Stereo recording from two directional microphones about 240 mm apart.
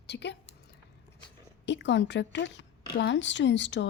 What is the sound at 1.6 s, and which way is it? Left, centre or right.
Speech, left.